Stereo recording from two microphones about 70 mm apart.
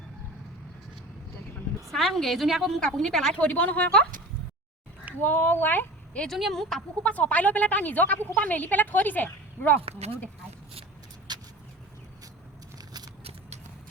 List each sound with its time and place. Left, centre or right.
1.9 s a woman's voice: centre
3.4 s speech: left
5.2 s speech: left
6.2 s a woman's voice: centre
7.0 s speech: left
11.3 s vehicle: right